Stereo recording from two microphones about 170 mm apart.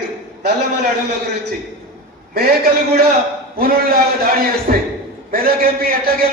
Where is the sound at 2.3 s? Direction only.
65° right (ahead or behind).